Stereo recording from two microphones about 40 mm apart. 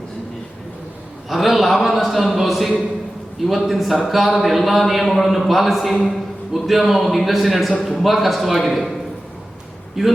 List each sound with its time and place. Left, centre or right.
1.3 s a man's voice: centre
10.0 s a man's voice: centre